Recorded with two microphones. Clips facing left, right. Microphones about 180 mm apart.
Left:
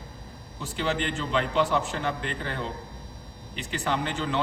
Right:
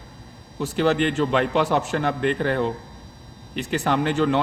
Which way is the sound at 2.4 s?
65° right (ahead or behind).